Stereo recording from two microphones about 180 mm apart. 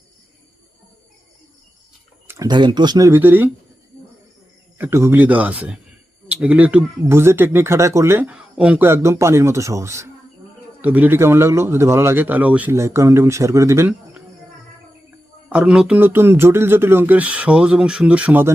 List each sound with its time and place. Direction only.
2.2 s speech: 20° right (ahead or behind)
4.8 s speech: 15° right (ahead or behind)
15.4 s speech: 5° right (ahead or behind)